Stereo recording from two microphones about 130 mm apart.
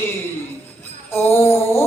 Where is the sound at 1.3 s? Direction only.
20° left (ahead or behind).